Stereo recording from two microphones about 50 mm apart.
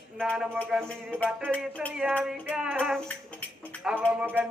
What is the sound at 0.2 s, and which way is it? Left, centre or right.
Music, centre.